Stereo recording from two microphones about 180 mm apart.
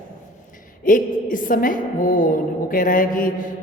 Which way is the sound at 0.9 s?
50° left (ahead or behind).